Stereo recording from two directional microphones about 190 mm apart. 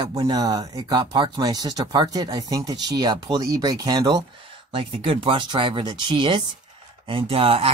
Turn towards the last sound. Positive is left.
turn(degrees=-30)  # may be behind; listen again after turning